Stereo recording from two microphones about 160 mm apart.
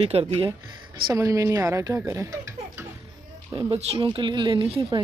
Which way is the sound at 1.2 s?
20° right (ahead or behind).